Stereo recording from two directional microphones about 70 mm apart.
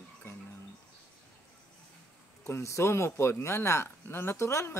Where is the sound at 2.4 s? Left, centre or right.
Left.